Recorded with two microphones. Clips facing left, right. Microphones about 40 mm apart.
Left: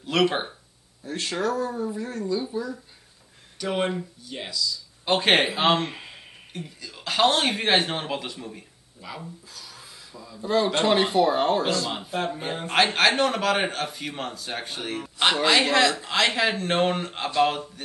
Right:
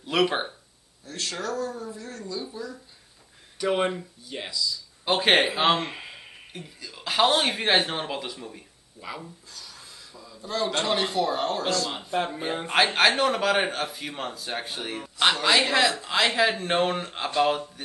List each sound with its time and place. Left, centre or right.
0.0 s speech: centre
1.0 s speech: left
3.6 s speech: centre
10.5 s speech: left
11.9 s speech: centre